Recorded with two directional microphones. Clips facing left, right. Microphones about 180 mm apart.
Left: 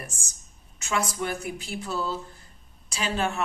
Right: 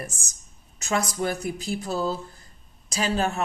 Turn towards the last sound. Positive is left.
turn(degrees=-40)  # may be behind; listen again after turning